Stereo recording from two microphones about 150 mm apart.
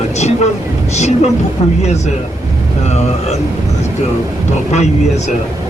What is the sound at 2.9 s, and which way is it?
Speech, 45° left (ahead or behind).